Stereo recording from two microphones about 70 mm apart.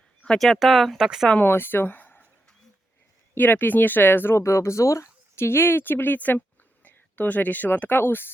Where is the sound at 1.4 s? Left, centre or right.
Left.